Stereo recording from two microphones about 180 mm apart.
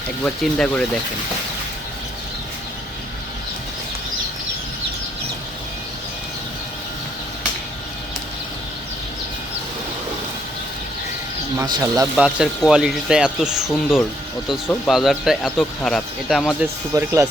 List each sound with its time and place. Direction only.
0.2 s speech: 5° left (ahead or behind)
11.5 s speech: 15° right (ahead or behind)
12.1 s speech: 5° right (ahead or behind)
16.9 s speech: 15° right (ahead or behind)